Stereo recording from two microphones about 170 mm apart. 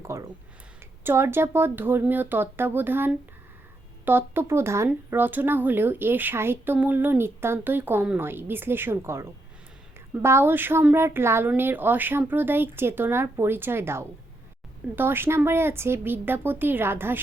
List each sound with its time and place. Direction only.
0.0 s speech: 15° right (ahead or behind)
10.2 s speech: 15° right (ahead or behind)